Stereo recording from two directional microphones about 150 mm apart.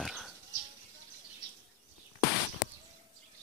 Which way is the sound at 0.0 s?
Centre (ahead or behind).